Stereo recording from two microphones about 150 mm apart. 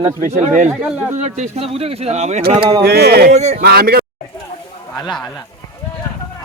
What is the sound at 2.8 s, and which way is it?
Speech, 90° right.